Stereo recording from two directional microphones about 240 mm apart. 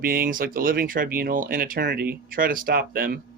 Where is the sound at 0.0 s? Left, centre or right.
Right.